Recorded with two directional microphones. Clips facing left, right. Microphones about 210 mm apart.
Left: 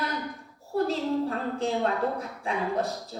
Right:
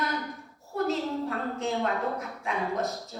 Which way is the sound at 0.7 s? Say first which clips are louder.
Left 2 dB; 30° left (ahead or behind).